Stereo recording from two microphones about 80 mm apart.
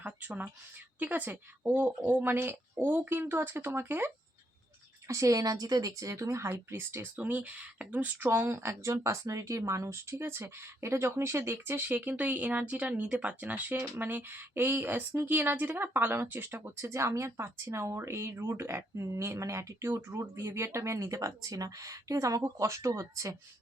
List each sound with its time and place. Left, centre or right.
0.0 s speech: right
5.0 s a woman's voice: right